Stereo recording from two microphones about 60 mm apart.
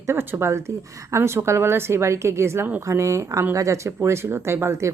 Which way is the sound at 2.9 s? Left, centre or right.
Right.